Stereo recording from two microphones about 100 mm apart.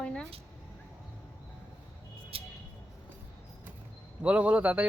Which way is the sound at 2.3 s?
75° right (ahead or behind).